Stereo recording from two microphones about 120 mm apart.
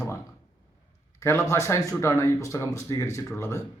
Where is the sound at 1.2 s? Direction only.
25° left (ahead or behind).